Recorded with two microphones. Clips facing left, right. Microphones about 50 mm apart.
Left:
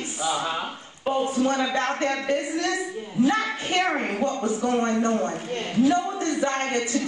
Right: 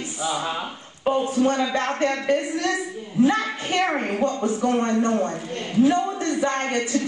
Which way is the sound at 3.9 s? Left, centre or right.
Centre.